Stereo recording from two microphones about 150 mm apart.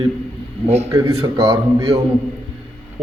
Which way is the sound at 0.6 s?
45° right (ahead or behind).